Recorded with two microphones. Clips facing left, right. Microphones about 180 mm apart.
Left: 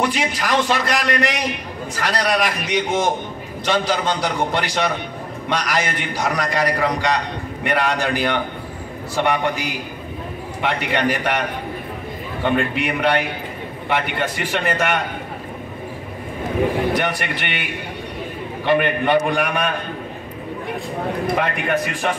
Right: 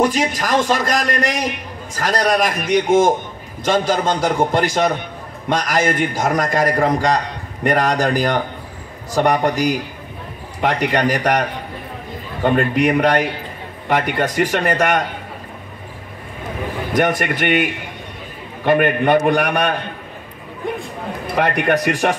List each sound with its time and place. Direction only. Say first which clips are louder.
0.0 s a man's voice: right 4 dB; 45° right (ahead or behind)
12.4 s a man's voice: right 5 dB; 45° right (ahead or behind)
16.9 s a man's voice: right 4 dB; 45° right (ahead or behind)
18.7 s a man's voice: right 3 dB; 45° right (ahead or behind); by 19.7 s 65° right (ahead or behind)
21.4 s a man's voice: right 4 dB; 65° right (ahead or behind)